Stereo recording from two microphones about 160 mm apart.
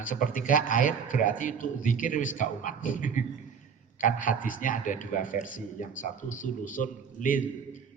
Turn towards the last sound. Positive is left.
turn(degrees=55)  # may be behind; listen again after turning